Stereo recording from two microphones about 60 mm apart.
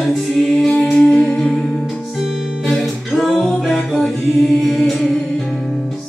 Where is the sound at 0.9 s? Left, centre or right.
Centre.